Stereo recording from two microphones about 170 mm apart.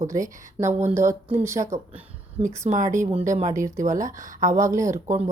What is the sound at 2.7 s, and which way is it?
Speech, 40° right (ahead or behind).